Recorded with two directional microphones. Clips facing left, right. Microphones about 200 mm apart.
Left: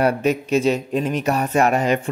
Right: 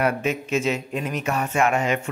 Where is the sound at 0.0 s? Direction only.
35° left (ahead or behind).